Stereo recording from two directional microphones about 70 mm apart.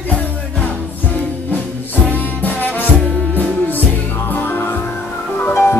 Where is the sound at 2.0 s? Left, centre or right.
Left.